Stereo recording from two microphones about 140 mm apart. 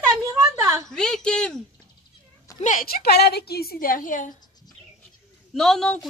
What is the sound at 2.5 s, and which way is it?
A woman's voice, 65° left (ahead or behind).